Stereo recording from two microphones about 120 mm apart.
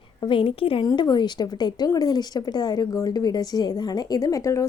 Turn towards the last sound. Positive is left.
turn(degrees=25)  # may be behind; listen again after turning